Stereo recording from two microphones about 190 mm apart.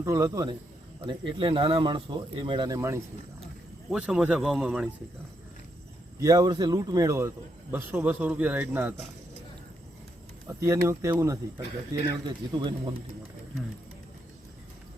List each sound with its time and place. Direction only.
0.0 s a man's voice: 15° right (ahead or behind)
3.4 s speech: 5° right (ahead or behind)
6.1 s a man's voice: 20° right (ahead or behind)
10.6 s a man's voice: 15° right (ahead or behind)